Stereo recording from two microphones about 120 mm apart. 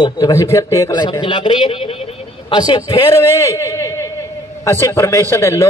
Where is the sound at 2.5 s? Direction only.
35° left (ahead or behind).